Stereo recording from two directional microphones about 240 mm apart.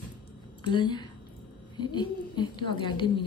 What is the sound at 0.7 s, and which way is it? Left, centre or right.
A woman's voice, centre.